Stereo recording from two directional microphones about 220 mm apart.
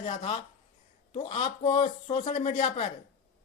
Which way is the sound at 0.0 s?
25° left (ahead or behind).